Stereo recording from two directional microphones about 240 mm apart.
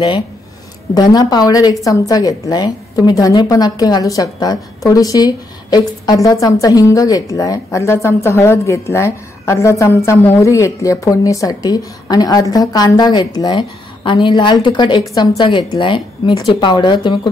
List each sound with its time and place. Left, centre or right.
0.9 s a woman's voice: centre